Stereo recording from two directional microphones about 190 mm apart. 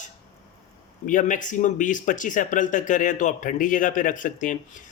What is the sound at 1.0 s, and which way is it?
A man's voice, 45° left (ahead or behind).